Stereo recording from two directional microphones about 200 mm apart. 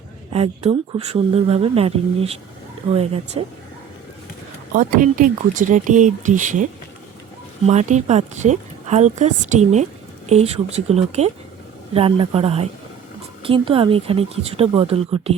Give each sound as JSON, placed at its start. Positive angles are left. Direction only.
{"t": 0.3, "sound": "speech", "side_deg": -30}
{"t": 4.7, "sound": "speech", "side_deg": -40}
{"t": 7.7, "sound": "speech", "side_deg": -35}